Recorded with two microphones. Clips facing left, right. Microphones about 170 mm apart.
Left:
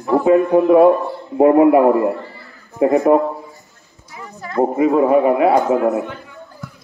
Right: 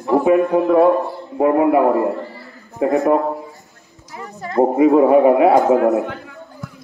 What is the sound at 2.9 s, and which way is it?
Speech, centre (ahead or behind).